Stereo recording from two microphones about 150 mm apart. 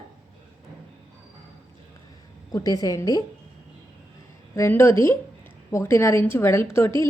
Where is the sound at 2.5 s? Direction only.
25° left (ahead or behind).